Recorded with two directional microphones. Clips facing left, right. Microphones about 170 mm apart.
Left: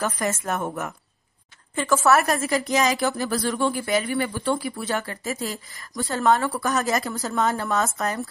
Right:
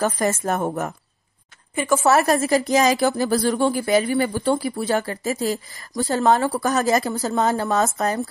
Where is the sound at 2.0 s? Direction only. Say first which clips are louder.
Right 3 dB; 30° right (ahead or behind).